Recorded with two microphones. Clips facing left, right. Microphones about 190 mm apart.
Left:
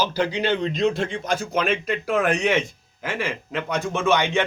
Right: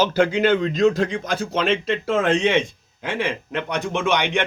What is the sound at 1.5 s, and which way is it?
Speech, 30° right (ahead or behind).